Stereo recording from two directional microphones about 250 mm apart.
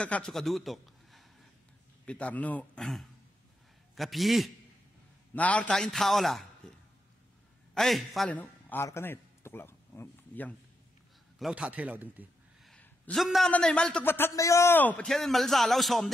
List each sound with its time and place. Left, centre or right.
0.0 s a man's voice: centre
6.6 s a sound: centre
7.7 s a man's voice: centre
11.3 s a man's voice: centre